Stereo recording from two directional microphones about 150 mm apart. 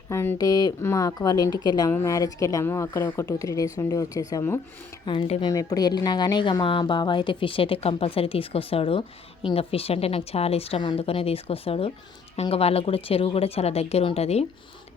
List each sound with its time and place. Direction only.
0.1 s a woman's voice: 20° left (ahead or behind)
5.0 s a woman's voice: 35° left (ahead or behind)